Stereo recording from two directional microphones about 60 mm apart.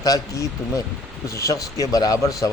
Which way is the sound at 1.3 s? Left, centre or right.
Left.